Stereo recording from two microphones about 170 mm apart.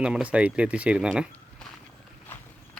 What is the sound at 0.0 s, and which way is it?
Speech, 5° right (ahead or behind).